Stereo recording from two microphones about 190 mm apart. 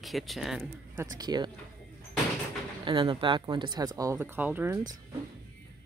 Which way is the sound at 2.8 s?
25° right (ahead or behind).